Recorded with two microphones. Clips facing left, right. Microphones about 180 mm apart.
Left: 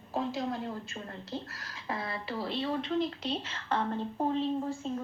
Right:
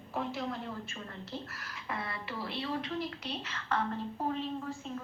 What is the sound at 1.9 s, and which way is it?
A woman's voice, 30° left (ahead or behind).